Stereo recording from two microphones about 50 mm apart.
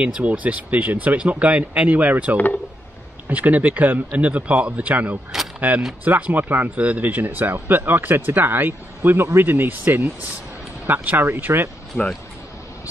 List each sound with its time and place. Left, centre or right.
0.0 s speech: right